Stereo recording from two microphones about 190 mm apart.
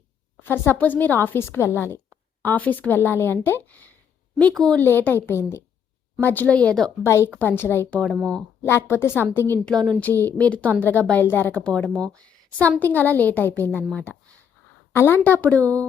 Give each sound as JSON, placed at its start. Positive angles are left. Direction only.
{"t": 0.4, "sound": "a woman's voice", "side_deg": 10}